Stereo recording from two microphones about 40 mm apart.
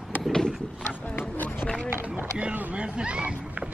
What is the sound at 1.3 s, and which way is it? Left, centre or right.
Run, left.